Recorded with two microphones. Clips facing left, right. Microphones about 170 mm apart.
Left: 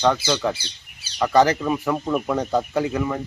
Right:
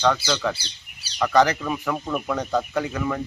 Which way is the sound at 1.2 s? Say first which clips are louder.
Left 2 dB; 20° left (ahead or behind).